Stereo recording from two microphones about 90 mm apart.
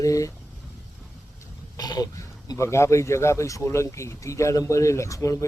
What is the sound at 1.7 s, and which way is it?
A man's voice, 50° left (ahead or behind).